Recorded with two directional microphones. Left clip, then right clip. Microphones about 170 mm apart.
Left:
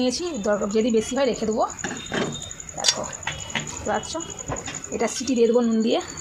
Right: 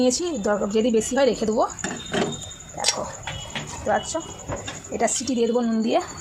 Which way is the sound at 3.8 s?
15° right (ahead or behind).